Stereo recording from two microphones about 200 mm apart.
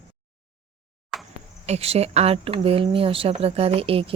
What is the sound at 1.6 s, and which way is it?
Speech, 30° right (ahead or behind).